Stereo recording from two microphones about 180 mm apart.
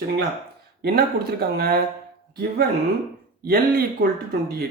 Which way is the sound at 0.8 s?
60° right (ahead or behind).